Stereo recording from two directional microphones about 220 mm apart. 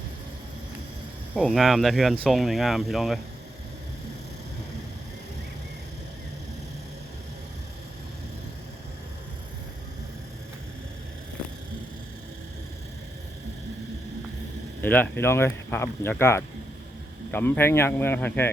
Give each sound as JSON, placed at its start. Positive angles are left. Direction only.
{"t": 1.3, "sound": "speech", "side_deg": -5}
{"t": 14.8, "sound": "speech", "side_deg": 5}